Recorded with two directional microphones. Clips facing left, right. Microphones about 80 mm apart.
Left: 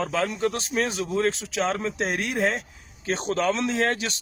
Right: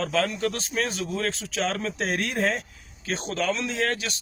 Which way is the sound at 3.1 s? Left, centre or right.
Left.